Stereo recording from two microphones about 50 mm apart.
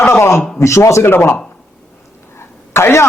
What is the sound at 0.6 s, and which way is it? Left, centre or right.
Speech, left.